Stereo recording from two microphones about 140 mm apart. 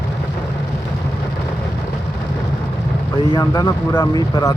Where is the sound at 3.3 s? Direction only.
25° left (ahead or behind).